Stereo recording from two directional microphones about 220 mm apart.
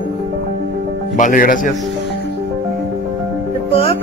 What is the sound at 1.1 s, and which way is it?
Speech, 40° left (ahead or behind).